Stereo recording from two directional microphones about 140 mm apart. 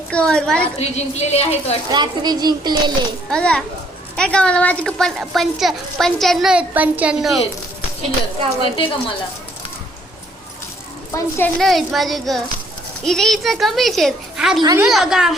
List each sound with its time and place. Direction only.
0.1 s a woman's voice: 5° left (ahead or behind)
0.8 s a woman's voice: 50° left (ahead or behind)
1.9 s a child's voice: 30° right (ahead or behind)
3.2 s a woman's voice: 5° left (ahead or behind)
8.7 s a woman's voice: 40° left (ahead or behind)
11.1 s a woman's voice: 15° left (ahead or behind)
11.6 s a woman's voice: centre (ahead or behind)
14.6 s a child's voice: 25° right (ahead or behind)
14.8 s a woman's voice: 5° right (ahead or behind)